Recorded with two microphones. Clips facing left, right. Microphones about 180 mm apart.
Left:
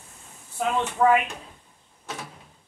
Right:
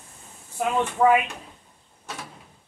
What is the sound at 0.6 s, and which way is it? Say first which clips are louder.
Speech: right 1 dB; 10° right (ahead or behind).